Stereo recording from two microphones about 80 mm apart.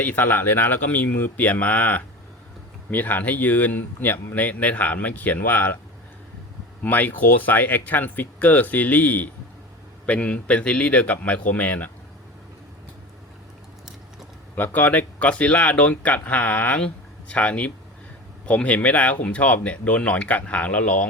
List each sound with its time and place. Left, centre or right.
0.0 s speech: left
6.8 s speech: left
14.5 s speech: left